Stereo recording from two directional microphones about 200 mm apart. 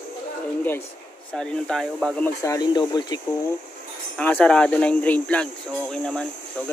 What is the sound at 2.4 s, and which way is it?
Speech, 15° left (ahead or behind).